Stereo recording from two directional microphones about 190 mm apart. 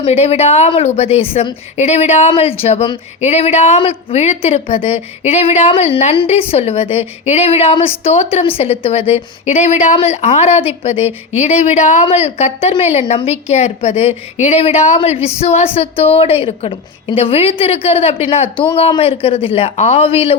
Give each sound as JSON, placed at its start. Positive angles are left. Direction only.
{"t": 0.0, "sound": "a woman's voice", "side_deg": 30}